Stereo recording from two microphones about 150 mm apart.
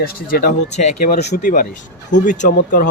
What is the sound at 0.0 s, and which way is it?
A man's voice, 85° left.